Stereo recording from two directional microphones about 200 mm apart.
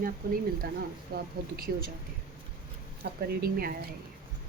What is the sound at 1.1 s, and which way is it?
Speech, 50° right (ahead or behind).